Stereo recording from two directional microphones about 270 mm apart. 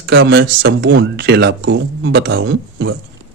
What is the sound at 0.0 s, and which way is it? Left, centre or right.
Speech, right.